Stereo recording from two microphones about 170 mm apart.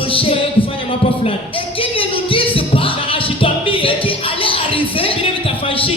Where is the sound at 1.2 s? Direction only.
30° left (ahead or behind).